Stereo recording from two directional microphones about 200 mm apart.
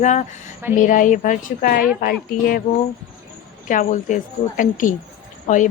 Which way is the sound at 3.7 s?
40° left (ahead or behind).